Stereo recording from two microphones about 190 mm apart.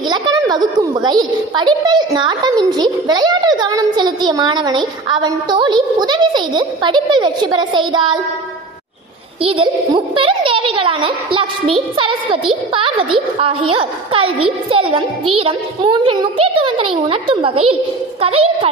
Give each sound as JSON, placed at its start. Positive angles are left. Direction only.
{"t": 0.1, "sound": "a sound", "side_deg": -25}
{"t": 0.7, "sound": "a child's voice", "side_deg": -25}
{"t": 9.4, "sound": "a child's voice", "side_deg": -30}